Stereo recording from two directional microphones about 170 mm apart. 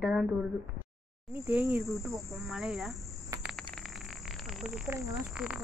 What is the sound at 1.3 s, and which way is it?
A woman's voice, 15° right (ahead or behind).